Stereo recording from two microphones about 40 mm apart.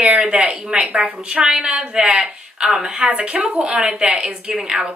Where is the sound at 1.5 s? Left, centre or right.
Centre.